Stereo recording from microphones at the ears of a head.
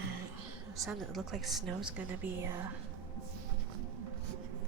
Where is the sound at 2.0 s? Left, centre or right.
Right.